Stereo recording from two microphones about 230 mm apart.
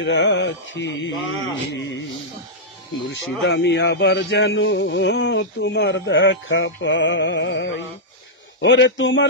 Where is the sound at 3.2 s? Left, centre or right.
Left.